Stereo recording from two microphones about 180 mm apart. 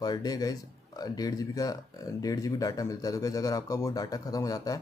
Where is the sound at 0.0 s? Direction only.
20° left (ahead or behind).